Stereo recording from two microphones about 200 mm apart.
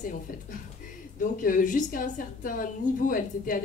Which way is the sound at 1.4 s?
40° left (ahead or behind).